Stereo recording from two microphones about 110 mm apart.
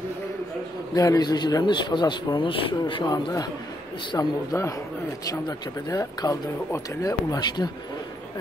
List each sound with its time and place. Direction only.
0.9 s speech: 30° left (ahead or behind)